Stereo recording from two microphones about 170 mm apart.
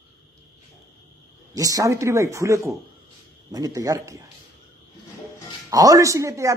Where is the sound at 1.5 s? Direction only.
20° right (ahead or behind).